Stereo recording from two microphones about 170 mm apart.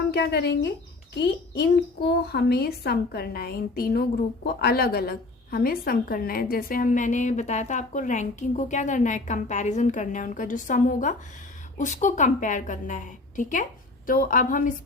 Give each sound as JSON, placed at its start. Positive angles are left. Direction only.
{"t": 0.1, "sound": "a woman's voice", "side_deg": 70}